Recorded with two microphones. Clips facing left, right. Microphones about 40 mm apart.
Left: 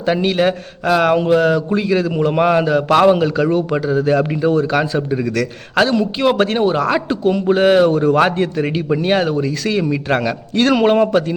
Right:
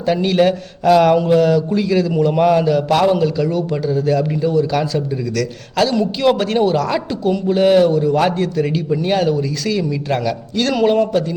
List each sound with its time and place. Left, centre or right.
0.0 s a man's voice: left
0.3 s a man's voice: centre; by 6.6 s left
6.6 s a man's voice: left
7.9 s a man's voice: left
8.2 s a man's voice: left